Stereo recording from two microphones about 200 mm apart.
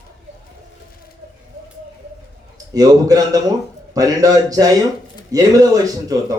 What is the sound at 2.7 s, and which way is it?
Speech, 20° right (ahead or behind).